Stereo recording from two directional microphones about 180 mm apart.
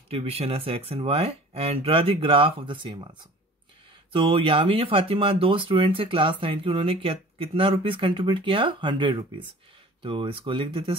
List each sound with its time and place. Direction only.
0.1 s speech: 35° right (ahead or behind)
4.1 s speech: 30° right (ahead or behind)